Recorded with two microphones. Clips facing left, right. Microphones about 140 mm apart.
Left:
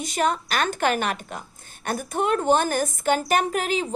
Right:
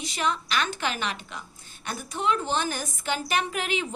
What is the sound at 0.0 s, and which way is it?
A woman's voice, 45° left (ahead or behind).